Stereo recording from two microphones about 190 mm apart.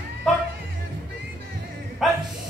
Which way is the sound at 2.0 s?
Centre (ahead or behind).